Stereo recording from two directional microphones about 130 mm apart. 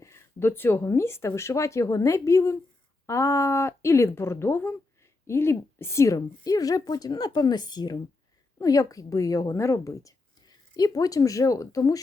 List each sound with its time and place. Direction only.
0.0 s a woman's voice: 20° left (ahead or behind)